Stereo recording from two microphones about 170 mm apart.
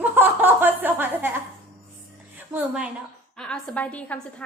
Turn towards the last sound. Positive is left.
turn(degrees=10)  # may be behind; listen again after turning